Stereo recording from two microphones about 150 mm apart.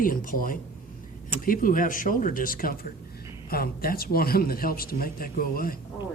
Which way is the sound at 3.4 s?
90° left.